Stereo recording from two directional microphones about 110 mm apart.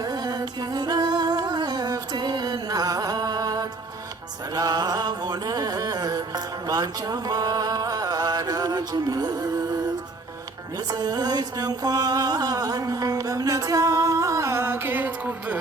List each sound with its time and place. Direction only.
0.0 s music: 40° right (ahead or behind); by 15.5 s 15° right (ahead or behind)